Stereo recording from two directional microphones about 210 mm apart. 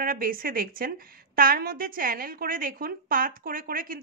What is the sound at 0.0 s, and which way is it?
A woman's voice, 40° right (ahead or behind).